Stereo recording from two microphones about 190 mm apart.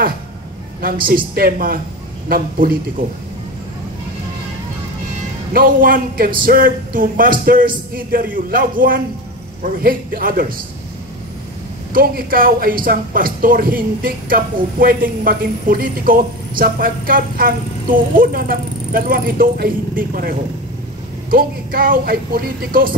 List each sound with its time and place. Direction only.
1.0 s speech: 50° right (ahead or behind)
5.5 s speech: 50° right (ahead or behind)
11.9 s speech: 50° right (ahead or behind)